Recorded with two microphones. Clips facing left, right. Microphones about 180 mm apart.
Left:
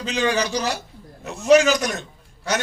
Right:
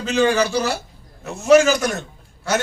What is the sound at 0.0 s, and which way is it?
A man's voice, 45° right (ahead or behind).